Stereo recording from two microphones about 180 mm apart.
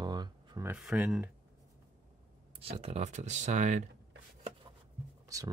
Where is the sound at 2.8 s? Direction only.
35° right (ahead or behind).